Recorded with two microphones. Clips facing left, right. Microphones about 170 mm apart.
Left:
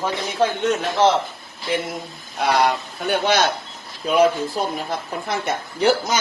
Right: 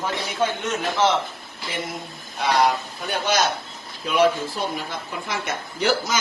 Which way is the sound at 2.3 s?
60° left (ahead or behind).